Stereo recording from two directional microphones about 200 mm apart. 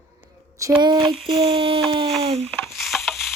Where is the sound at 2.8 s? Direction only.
Centre (ahead or behind).